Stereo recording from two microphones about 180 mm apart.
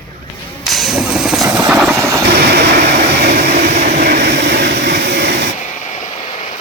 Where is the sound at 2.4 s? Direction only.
65° right (ahead or behind).